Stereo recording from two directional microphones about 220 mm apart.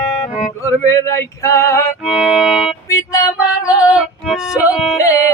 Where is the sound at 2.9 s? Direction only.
15° left (ahead or behind).